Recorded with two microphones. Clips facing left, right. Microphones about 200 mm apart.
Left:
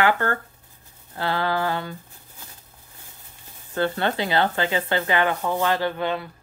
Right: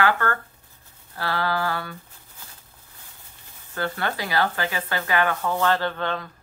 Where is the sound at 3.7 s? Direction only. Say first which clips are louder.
Left 4 dB; 25° left (ahead or behind).